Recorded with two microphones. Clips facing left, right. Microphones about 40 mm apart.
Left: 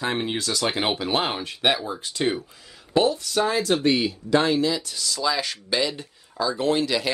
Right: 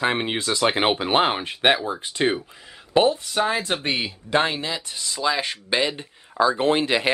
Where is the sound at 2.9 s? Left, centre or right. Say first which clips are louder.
Right 2 dB; right.